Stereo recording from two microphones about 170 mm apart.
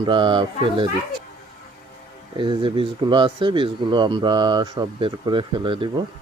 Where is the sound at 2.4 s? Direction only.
30° right (ahead or behind).